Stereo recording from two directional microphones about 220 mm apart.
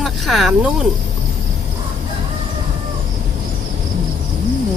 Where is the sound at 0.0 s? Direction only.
Centre (ahead or behind).